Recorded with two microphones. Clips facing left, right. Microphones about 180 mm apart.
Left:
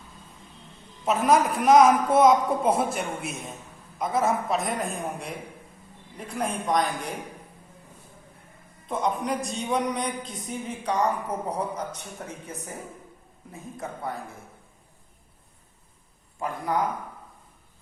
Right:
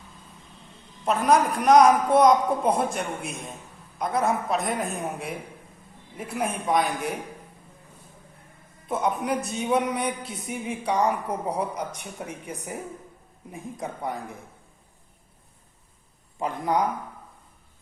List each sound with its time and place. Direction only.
1.0 s a woman's voice: centre (ahead or behind)
8.9 s speech: 5° right (ahead or behind)
16.4 s a man's voice: 20° right (ahead or behind)